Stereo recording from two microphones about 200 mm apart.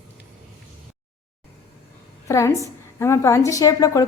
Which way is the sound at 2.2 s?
15° left (ahead or behind).